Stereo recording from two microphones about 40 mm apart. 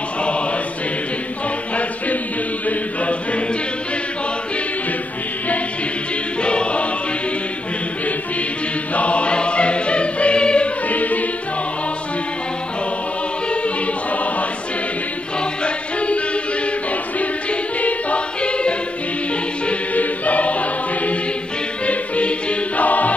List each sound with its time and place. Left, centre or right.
6.4 s choir: left
8.9 s choir: left
10.9 s music: left
15.6 s music: left
17.2 s music: left
18.4 s choir: left
19.9 s choir: left
21.8 s music: left